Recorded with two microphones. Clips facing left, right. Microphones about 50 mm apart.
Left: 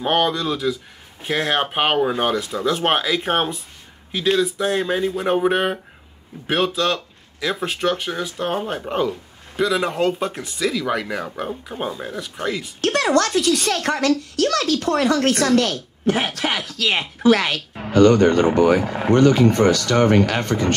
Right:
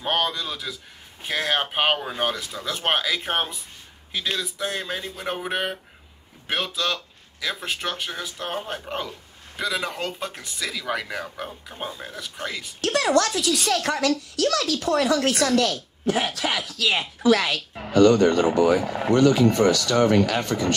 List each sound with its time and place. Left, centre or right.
0.0 s speech: centre
10.6 s speech: centre
11.1 s speech: centre
12.8 s a woman's voice: left